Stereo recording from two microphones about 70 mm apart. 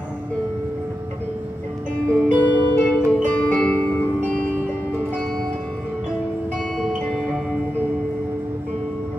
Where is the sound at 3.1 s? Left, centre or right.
Centre.